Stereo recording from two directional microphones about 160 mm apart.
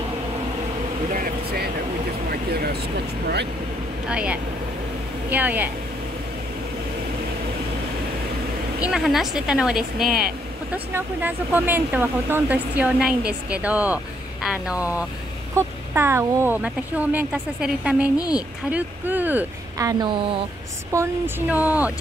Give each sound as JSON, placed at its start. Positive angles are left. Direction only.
{"t": 1.1, "sound": "vehicle", "side_deg": -60}
{"t": 2.3, "sound": "speech", "side_deg": -80}
{"t": 4.1, "sound": "speech", "side_deg": -5}
{"t": 8.8, "sound": "speech", "side_deg": 0}
{"t": 10.7, "sound": "speech", "side_deg": -10}
{"t": 18.1, "sound": "a woman's voice", "side_deg": 25}
{"t": 18.7, "sound": "speech", "side_deg": -10}
{"t": 20.9, "sound": "speech", "side_deg": -15}